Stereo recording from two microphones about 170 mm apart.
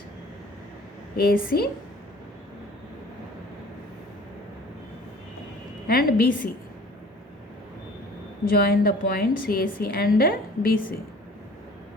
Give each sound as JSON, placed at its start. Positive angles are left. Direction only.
{"t": 1.1, "sound": "a woman's voice", "side_deg": 60}
{"t": 5.9, "sound": "a woman's voice", "side_deg": 60}
{"t": 8.4, "sound": "a woman's voice", "side_deg": 65}